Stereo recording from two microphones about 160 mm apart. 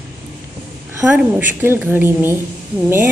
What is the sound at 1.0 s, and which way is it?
A woman's voice, 10° right (ahead or behind).